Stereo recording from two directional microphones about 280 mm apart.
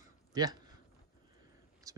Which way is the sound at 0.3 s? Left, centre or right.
Centre.